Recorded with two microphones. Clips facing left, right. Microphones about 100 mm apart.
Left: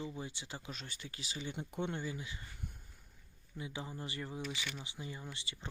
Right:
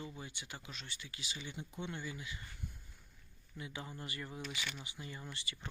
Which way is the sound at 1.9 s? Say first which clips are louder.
Left 3 dB; 30° left (ahead or behind).